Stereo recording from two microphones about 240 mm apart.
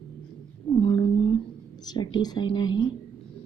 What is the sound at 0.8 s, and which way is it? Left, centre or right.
A woman's voice, left.